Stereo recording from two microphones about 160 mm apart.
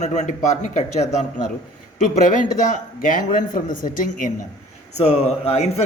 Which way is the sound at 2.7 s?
55° left (ahead or behind).